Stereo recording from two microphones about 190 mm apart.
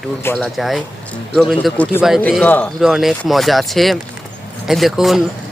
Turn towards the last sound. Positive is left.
turn(degrees=0)  # may be behind; listen again after turning